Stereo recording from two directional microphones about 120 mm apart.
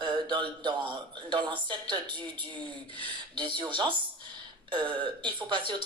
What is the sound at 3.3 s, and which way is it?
Speech, 40° right (ahead or behind).